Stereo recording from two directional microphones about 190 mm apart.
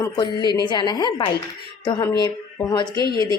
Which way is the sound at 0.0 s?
20° left (ahead or behind).